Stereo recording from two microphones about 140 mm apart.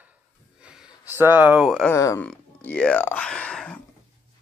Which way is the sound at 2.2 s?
10° left (ahead or behind).